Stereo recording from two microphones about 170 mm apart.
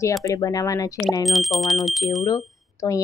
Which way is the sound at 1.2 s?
Centre (ahead or behind).